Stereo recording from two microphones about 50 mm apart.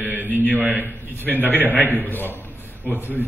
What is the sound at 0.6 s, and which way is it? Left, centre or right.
Speech, right.